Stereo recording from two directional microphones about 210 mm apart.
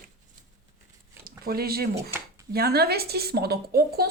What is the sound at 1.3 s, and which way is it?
Speech, 45° right (ahead or behind).